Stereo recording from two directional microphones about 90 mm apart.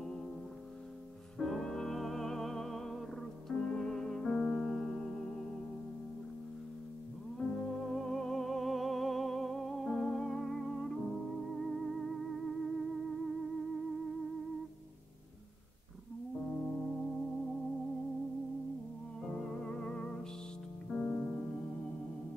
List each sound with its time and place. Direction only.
1.4 s music: 5° left (ahead or behind)
7.3 s music: 5° left (ahead or behind)
16.4 s music: 5° left (ahead or behind)
19.2 s music: 10° left (ahead or behind)
20.9 s piano: centre (ahead or behind)